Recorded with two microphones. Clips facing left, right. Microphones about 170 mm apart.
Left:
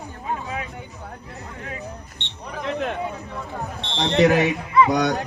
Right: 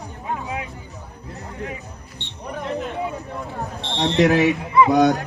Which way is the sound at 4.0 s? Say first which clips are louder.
Even; centre (ahead or behind).